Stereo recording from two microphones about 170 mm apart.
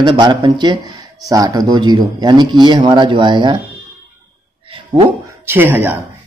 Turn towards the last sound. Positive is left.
turn(degrees=-10)  # may be behind; listen again after turning